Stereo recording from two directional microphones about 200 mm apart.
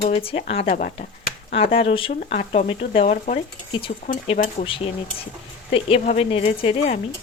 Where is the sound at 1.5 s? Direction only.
30° left (ahead or behind).